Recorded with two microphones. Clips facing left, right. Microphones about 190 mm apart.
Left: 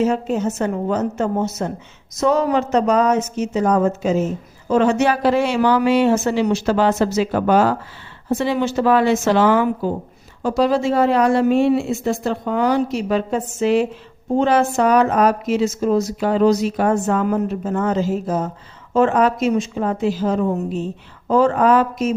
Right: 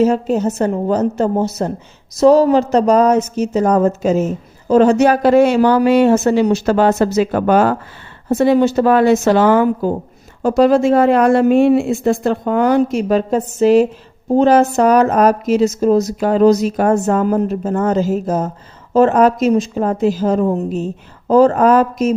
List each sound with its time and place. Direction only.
0.0 s a woman's voice: 35° right (ahead or behind); by 7.8 s 55° right (ahead or behind)
8.3 s a woman's voice: 40° right (ahead or behind)